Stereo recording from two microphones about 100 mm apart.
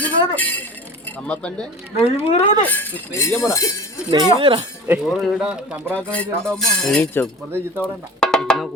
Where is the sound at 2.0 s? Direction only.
85° left.